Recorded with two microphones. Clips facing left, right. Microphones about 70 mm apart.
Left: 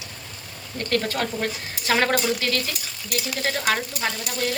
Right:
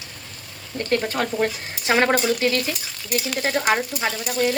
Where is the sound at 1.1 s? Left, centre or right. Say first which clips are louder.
Right 4 dB; right.